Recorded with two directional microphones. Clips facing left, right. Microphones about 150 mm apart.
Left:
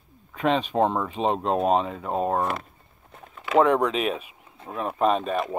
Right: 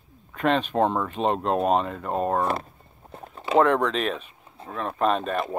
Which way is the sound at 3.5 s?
5° left (ahead or behind).